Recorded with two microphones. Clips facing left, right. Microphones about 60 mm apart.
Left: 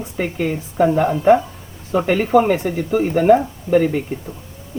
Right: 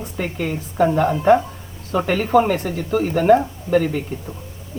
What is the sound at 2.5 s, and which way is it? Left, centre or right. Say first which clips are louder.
Speech: left 2 dB; left.